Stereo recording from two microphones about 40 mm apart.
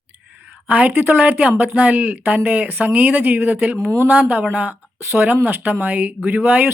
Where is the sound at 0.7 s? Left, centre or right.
Right.